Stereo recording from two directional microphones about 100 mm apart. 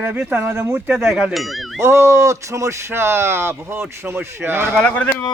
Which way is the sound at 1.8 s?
30° right (ahead or behind).